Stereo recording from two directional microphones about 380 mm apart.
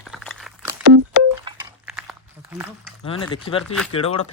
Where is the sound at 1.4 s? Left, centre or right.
Centre.